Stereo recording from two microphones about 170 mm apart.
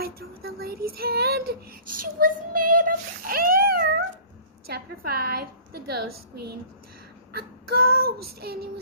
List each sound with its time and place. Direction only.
0.0 s child singing: 65° right (ahead or behind)
2.1 s child singing: 60° right (ahead or behind)
4.6 s a woman's voice: 65° right (ahead or behind)
7.3 s child singing: 65° right (ahead or behind)